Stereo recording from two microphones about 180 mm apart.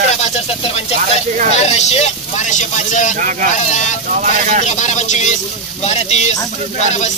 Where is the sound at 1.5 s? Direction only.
40° left (ahead or behind).